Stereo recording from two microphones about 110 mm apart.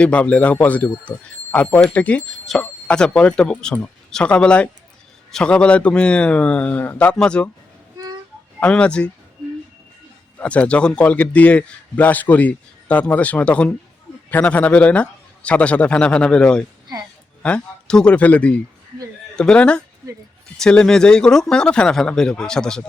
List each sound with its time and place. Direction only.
0.0 s a man's voice: 10° left (ahead or behind)
2.2 s a man's voice: centre (ahead or behind)
7.9 s a sound: 35° right (ahead or behind)
8.6 s a man's voice: 10° left (ahead or behind)
10.3 s a man's voice: 10° left (ahead or behind)